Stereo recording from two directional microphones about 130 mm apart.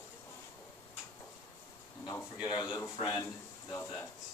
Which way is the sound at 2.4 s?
35° left (ahead or behind).